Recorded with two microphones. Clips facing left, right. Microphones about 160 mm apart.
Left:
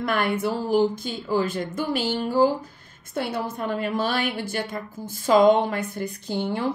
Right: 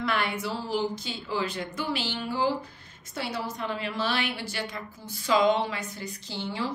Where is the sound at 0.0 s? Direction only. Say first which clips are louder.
Left 5 dB; 50° left (ahead or behind).